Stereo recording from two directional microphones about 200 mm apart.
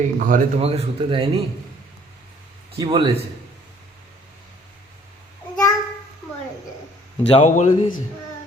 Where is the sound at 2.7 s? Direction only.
25° right (ahead or behind).